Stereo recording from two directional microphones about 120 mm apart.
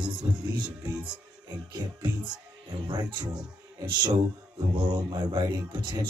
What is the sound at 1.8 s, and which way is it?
Speech, 35° right (ahead or behind).